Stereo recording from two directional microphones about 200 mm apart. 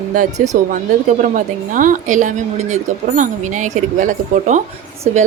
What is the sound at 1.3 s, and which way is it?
A woman's voice, 40° right (ahead or behind).